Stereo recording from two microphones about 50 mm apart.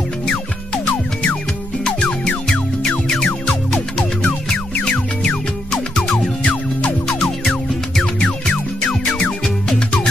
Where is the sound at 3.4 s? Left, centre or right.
Centre.